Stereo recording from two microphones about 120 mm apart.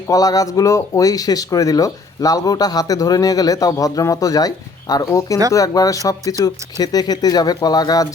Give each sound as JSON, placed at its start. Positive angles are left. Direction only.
{"t": 0.1, "sound": "speech", "side_deg": 30}